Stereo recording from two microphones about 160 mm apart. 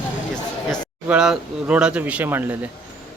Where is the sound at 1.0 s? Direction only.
5° right (ahead or behind).